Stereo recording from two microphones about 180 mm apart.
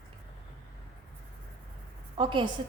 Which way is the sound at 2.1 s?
25° right (ahead or behind).